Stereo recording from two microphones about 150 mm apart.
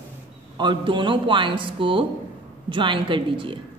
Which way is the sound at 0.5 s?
30° right (ahead or behind).